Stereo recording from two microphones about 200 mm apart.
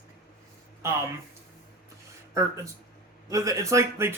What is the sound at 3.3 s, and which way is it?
Speech, 15° right (ahead or behind).